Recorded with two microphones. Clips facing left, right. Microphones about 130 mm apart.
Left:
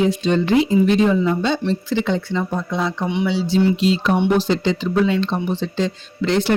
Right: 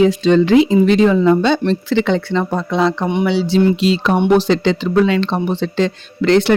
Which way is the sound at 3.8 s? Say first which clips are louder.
Right 2 dB; 85° right.